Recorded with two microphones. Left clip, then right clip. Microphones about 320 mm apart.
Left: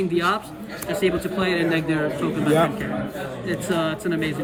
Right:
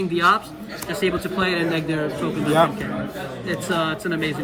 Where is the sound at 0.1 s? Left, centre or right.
Centre.